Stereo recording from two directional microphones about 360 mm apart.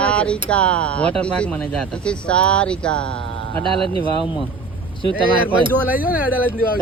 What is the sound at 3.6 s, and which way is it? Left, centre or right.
Speech, centre.